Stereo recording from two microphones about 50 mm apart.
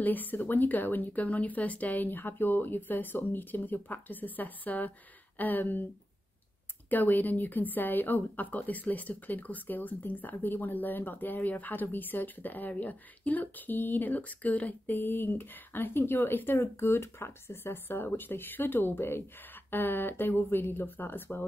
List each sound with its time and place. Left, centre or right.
0.0 s a woman's voice: left
6.9 s a woman's voice: left